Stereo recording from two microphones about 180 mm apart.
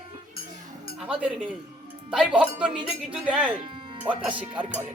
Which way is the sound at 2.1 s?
5° right (ahead or behind).